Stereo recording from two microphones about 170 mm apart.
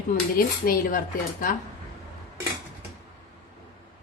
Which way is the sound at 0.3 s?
60° left (ahead or behind).